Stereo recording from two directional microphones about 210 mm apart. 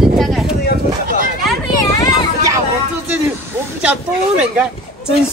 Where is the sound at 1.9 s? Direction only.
15° left (ahead or behind).